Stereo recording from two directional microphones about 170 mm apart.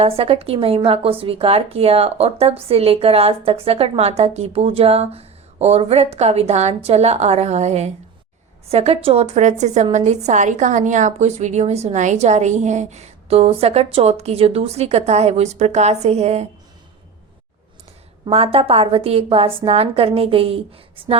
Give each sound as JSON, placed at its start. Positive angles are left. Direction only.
{"t": 0.0, "sound": "speech", "side_deg": -35}
{"t": 18.3, "sound": "speech", "side_deg": -35}